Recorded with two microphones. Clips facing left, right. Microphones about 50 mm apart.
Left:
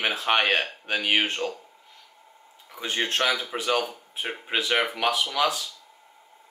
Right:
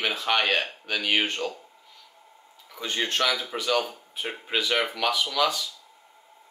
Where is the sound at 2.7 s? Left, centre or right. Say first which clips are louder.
Left 1 dB; centre.